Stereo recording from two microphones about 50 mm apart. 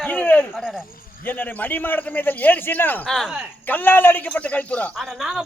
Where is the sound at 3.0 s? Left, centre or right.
Centre.